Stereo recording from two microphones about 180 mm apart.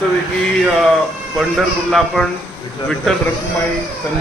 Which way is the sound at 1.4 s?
Centre (ahead or behind).